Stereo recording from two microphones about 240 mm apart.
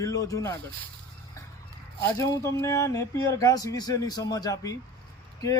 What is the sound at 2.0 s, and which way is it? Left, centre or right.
Speech, centre.